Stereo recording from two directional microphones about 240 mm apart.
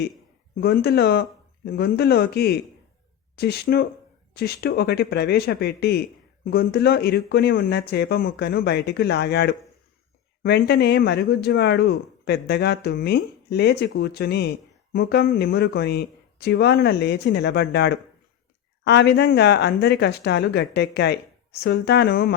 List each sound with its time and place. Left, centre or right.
0.5 s speech: left